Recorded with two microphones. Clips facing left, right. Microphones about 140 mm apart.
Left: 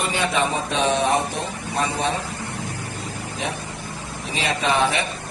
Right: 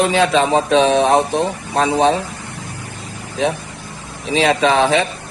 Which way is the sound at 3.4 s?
90° right.